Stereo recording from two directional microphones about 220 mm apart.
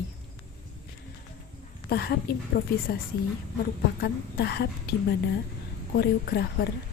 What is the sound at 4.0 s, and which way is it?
Speech, 45° left (ahead or behind).